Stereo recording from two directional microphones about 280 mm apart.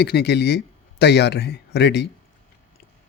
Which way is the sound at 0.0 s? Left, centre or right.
Left.